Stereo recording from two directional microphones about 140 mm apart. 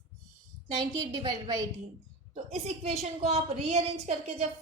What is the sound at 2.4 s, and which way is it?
A woman's voice, 50° right (ahead or behind).